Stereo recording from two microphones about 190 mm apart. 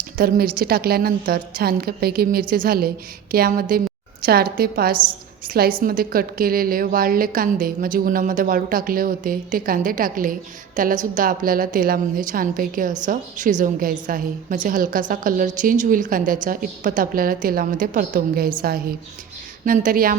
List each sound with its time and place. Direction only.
0.2 s a woman's voice: 50° right (ahead or behind)